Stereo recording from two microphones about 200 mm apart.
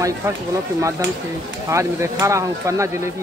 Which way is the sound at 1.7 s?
15° right (ahead or behind).